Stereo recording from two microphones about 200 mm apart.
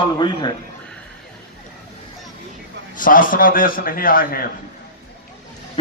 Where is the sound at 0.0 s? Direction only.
25° left (ahead or behind).